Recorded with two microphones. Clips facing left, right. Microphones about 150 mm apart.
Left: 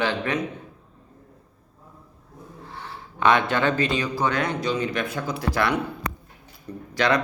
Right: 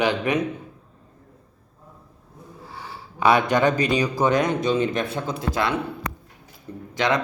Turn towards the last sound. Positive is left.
turn(degrees=-20)  # may be behind; listen again after turning